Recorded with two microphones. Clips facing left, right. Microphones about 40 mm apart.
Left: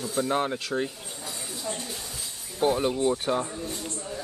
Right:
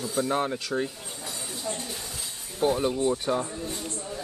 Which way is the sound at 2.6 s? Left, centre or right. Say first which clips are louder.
Left 1 dB; centre.